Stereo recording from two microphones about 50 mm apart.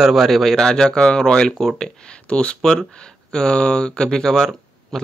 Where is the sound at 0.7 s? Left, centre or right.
Centre.